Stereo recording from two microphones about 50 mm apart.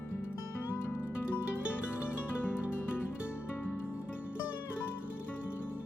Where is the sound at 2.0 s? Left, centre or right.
Left.